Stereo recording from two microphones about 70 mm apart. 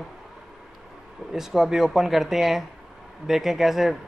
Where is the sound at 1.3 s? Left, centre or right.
Centre.